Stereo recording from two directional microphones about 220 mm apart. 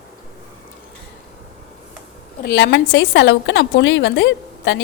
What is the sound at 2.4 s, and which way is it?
A woman's voice, 50° left (ahead or behind).